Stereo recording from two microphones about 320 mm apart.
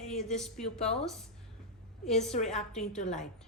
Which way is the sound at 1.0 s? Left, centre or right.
Centre.